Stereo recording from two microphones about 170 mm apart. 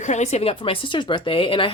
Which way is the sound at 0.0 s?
40° left (ahead or behind).